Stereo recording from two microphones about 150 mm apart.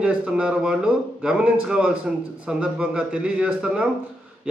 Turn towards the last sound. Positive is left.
turn(degrees=-5)  # may be behind; listen again after turning